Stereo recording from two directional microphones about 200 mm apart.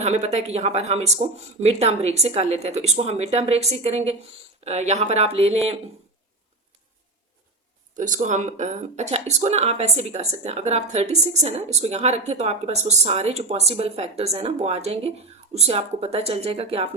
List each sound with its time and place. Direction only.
0.0 s speech: 35° right (ahead or behind)
7.9 s speech: 40° right (ahead or behind)